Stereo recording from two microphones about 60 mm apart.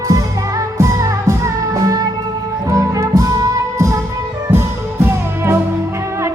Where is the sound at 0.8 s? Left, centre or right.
Right.